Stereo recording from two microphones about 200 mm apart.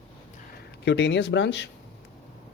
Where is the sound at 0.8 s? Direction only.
60° left (ahead or behind).